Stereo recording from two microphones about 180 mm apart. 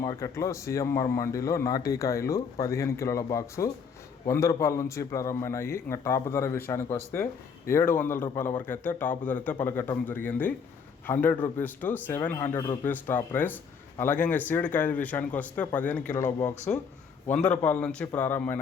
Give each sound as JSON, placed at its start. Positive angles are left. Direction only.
{"t": 0.0, "sound": "a man's voice", "side_deg": 15}